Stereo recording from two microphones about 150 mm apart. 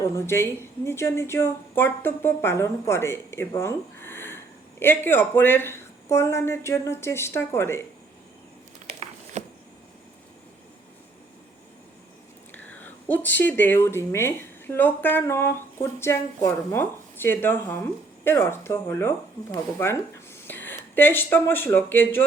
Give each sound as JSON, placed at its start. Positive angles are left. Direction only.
{"t": 0.3, "sound": "speech", "side_deg": 15}
{"t": 9.4, "sound": "a sound", "side_deg": -50}
{"t": 12.5, "sound": "speech", "side_deg": 10}